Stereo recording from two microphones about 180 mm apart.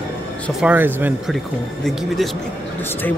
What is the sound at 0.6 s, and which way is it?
Speech, 10° right (ahead or behind).